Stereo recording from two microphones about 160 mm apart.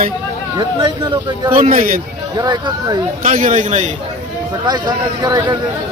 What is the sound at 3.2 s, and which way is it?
Speech, 50° right (ahead or behind).